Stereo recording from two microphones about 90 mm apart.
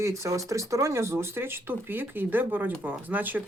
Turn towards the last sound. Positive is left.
turn(degrees=-20)  # may be behind; listen again after turning